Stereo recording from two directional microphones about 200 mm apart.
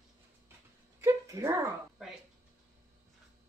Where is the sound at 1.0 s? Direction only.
15° right (ahead or behind).